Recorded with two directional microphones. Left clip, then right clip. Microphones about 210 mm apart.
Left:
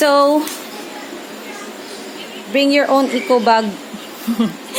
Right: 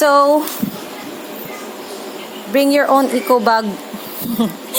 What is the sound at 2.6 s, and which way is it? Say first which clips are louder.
Speech: right 1 dB; 10° right (ahead or behind).